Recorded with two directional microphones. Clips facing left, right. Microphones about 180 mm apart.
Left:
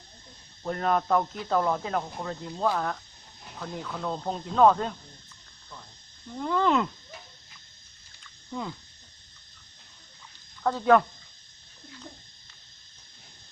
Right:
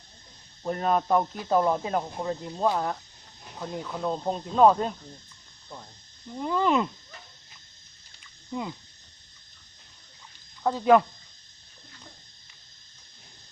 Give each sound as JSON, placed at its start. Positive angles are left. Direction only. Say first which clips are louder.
{"t": 0.6, "sound": "speech", "louder": "right 1 dB", "side_deg": -20}
{"t": 6.3, "sound": "speech", "louder": "even", "side_deg": -15}
{"t": 10.6, "sound": "speech", "louder": "right 1 dB", "side_deg": -15}